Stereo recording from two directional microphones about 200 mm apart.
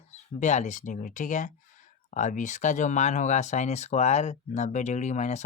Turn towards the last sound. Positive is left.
turn(degrees=35)  # may be behind; listen again after turning